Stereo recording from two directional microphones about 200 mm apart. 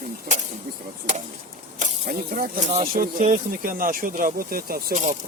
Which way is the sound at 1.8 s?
40° right (ahead or behind).